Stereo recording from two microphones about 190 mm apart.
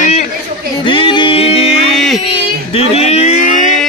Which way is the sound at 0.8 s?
25° left (ahead or behind).